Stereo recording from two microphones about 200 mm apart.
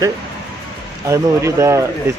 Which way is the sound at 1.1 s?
15° right (ahead or behind).